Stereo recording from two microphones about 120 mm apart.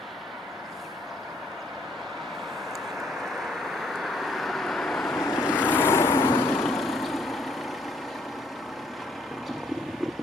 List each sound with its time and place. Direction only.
3.4 s vehicle: centre (ahead or behind)
5.5 s vehicle: 15° left (ahead or behind)
6.6 s vehicle: centre (ahead or behind)